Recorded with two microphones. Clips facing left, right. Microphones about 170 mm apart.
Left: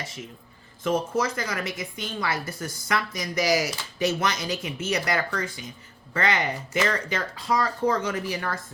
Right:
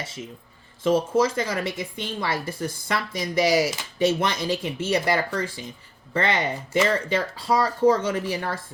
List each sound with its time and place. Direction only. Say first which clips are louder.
0.0 s a woman's voice: right 2 dB; 25° right (ahead or behind)